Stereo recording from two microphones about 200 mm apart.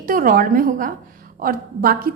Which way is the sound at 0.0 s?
45° right (ahead or behind).